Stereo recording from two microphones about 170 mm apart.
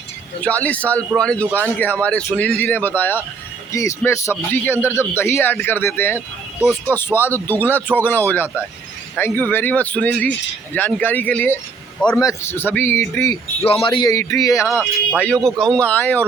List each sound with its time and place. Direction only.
0.4 s speech: 10° left (ahead or behind)
12.2 s speech: 15° left (ahead or behind)
13.7 s speech: 30° left (ahead or behind)
14.7 s speech: 10° right (ahead or behind)
15.4 s speech: 5° left (ahead or behind)